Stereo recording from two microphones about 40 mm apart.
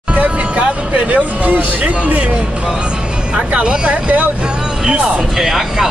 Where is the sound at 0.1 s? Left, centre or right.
Right.